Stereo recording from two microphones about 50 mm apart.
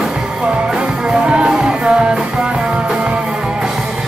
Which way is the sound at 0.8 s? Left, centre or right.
Centre.